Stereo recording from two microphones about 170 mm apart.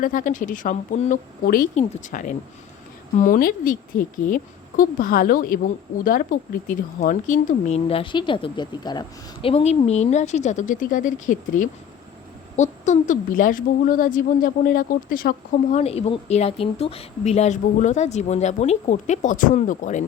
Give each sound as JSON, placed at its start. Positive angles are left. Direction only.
{"t": 0.0, "sound": "a woman's voice", "side_deg": 50}
{"t": 4.8, "sound": "a woman's voice", "side_deg": 55}
{"t": 15.8, "sound": "speech", "side_deg": 40}